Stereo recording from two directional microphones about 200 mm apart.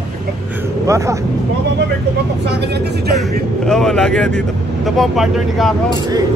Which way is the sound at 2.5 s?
60° right (ahead or behind).